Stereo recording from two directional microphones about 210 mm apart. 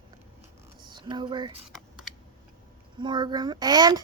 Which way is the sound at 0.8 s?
20° right (ahead or behind).